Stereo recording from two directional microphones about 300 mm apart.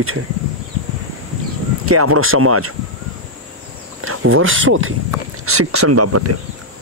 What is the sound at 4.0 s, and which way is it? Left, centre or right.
Speech, right.